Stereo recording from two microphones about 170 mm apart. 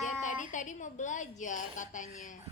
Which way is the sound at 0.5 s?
45° left (ahead or behind).